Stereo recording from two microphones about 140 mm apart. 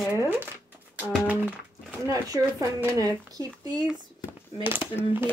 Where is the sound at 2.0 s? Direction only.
25° right (ahead or behind).